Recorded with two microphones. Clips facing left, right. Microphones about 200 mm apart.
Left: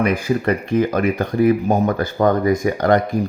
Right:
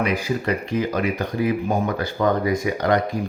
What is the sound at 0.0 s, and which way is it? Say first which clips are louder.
Speech: left 4 dB; 55° left (ahead or behind).